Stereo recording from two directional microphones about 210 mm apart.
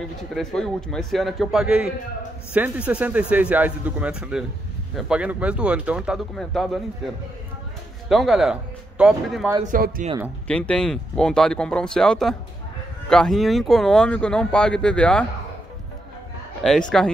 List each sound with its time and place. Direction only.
0.3 s speech: centre (ahead or behind)
8.1 s speech: centre (ahead or behind)
9.6 s speech: 40° right (ahead or behind)
10.5 s speech: 5° left (ahead or behind)
16.6 s speech: centre (ahead or behind)